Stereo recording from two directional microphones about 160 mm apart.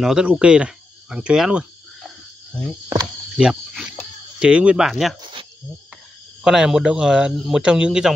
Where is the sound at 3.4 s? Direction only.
5° right (ahead or behind).